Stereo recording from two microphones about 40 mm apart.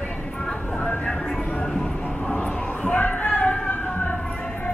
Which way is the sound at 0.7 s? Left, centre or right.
Left.